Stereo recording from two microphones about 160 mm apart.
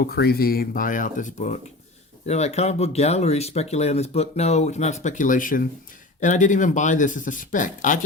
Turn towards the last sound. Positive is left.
turn(degrees=55)  # may be behind; listen again after turning